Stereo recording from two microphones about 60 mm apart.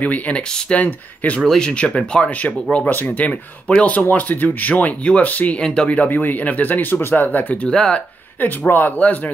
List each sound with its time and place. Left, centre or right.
0.0 s speech: left
0.7 s speech: left
1.4 s speech: centre
2.9 s speech: left; by 8.0 s centre
8.4 s speech: left